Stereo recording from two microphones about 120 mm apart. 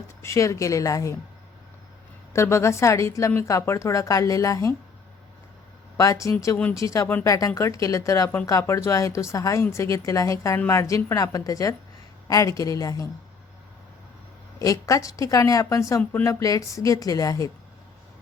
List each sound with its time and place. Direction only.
0.2 s a woman's voice: 25° left (ahead or behind)
2.3 s a woman's voice: 25° left (ahead or behind)
6.0 s a woman's voice: 25° left (ahead or behind)
14.6 s a woman's voice: 30° left (ahead or behind)